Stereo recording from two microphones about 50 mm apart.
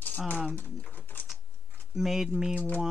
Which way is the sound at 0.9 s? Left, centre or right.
Left.